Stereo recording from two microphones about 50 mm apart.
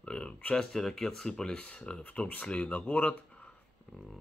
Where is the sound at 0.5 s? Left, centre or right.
Centre; by 3.1 s left.